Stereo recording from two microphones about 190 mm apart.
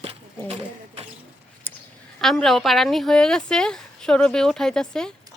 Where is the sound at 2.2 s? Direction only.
Centre (ahead or behind).